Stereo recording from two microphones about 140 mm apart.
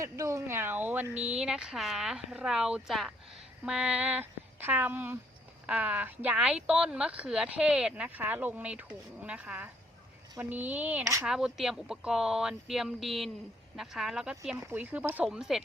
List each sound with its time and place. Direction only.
0.0 s speech: 20° right (ahead or behind)
11.0 s speech: 20° right (ahead or behind)
11.3 s speech: 5° right (ahead or behind)
14.5 s speech: 15° right (ahead or behind)